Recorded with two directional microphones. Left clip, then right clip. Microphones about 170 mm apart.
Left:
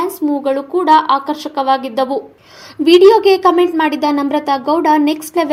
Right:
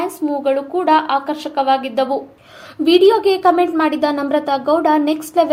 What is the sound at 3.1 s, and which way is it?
A woman's voice, 35° left (ahead or behind).